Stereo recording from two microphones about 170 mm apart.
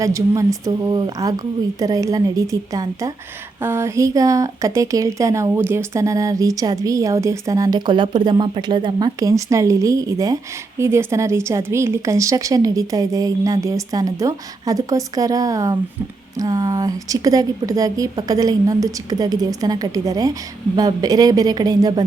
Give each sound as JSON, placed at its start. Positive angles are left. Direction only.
{"t": 0.0, "sound": "speech", "side_deg": -20}